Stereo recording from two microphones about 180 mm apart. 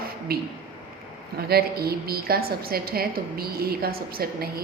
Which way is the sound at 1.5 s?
60° right (ahead or behind).